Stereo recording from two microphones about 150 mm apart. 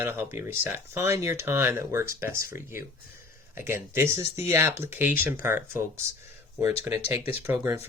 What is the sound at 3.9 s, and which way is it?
Speech, 15° right (ahead or behind).